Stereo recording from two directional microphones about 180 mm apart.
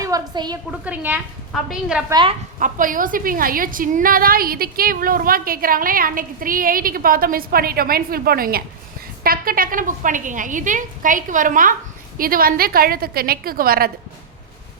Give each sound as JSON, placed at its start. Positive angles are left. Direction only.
{"t": 0.0, "sound": "a woman's voice", "side_deg": -20}
{"t": 0.7, "sound": "a woman's voice", "side_deg": -10}
{"t": 2.0, "sound": "speech", "side_deg": -25}
{"t": 2.6, "sound": "a woman's voice", "side_deg": -45}